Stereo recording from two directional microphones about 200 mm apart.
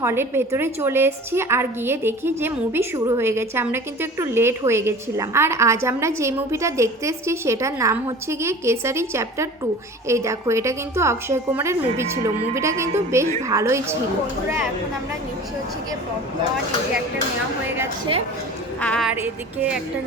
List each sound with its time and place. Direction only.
0.0 s a woman's voice: 10° right (ahead or behind)
18.8 s a woman's voice: 5° left (ahead or behind)
19.1 s a woman's voice: 10° right (ahead or behind)